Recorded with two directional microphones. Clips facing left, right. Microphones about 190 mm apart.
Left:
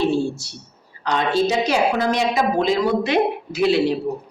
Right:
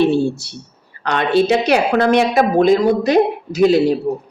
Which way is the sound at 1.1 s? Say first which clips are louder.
Right 5 dB; 65° right (ahead or behind).